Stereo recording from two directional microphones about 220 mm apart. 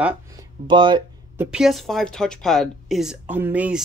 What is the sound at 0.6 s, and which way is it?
Speech, 20° right (ahead or behind).